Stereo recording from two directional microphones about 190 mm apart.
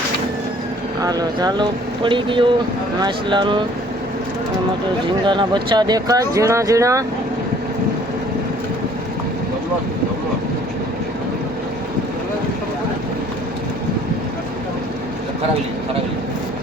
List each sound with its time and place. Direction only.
1.0 s speech: 20° right (ahead or behind)
5.2 s speech: 25° right (ahead or behind)